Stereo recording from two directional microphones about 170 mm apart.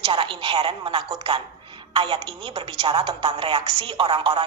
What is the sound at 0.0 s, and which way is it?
A woman's voice, 30° right (ahead or behind).